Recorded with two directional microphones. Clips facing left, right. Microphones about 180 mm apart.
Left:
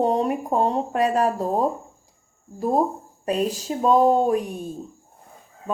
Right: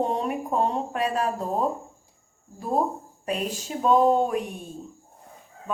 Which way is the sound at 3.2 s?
40° left (ahead or behind).